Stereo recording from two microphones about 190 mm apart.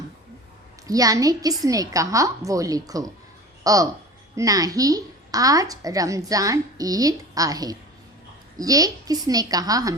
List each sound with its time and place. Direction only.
0.9 s a woman's voice: 20° right (ahead or behind)